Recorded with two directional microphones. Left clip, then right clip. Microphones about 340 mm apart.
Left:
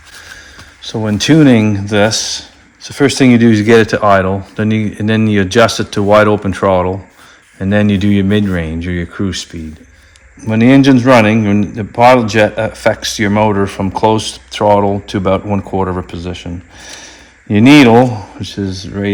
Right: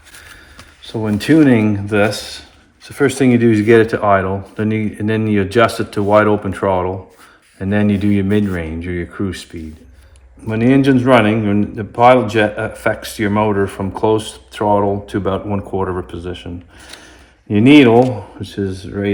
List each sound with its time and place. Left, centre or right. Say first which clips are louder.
0.8 s a man's voice: left 5 dB; left
17.5 s a man's voice: left 3 dB; left